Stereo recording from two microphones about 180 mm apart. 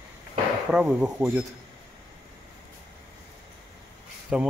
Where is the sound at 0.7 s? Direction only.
5° right (ahead or behind).